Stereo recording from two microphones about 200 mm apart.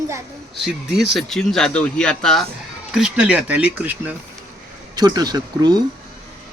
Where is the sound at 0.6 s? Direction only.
Centre (ahead or behind).